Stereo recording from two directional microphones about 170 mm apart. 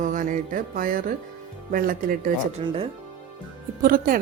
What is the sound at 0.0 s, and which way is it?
Music, 50° right (ahead or behind).